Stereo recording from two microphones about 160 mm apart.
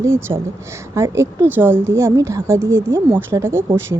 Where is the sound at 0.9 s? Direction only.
15° right (ahead or behind).